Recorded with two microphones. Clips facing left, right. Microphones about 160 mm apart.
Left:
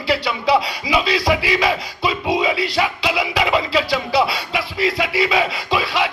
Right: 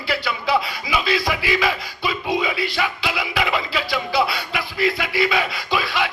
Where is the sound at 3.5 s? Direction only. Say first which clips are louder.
Left 5 dB; 35° left (ahead or behind).